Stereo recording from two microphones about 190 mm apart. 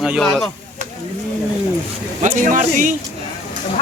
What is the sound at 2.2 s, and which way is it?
Speech, 45° right (ahead or behind).